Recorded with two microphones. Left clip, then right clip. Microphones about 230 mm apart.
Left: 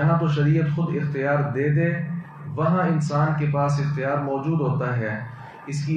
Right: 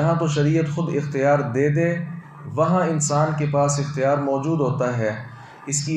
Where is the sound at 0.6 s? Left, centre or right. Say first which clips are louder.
Right 3 dB; right.